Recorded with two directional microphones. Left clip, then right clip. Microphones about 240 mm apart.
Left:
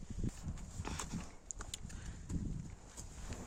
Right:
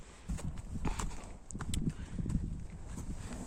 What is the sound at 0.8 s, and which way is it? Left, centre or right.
Clip-clop, centre.